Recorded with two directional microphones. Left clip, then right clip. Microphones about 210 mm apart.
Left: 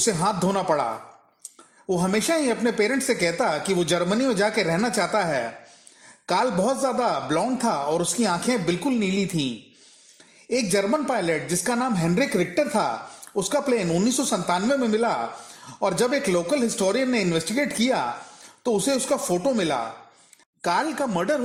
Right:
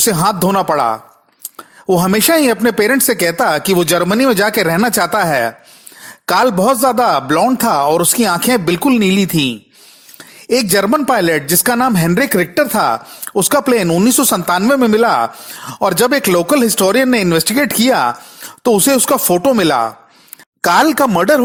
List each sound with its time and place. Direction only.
0.0 s a man's voice: 35° right (ahead or behind)
1.9 s a man's voice: 40° right (ahead or behind)
10.5 s a man's voice: 35° right (ahead or behind)